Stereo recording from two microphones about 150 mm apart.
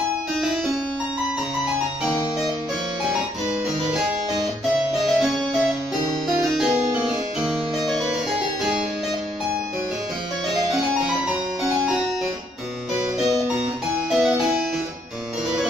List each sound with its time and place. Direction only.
5.0 s music: centre (ahead or behind)
6.2 s keyboard: centre (ahead or behind)
14.1 s keyboard: 5° right (ahead or behind)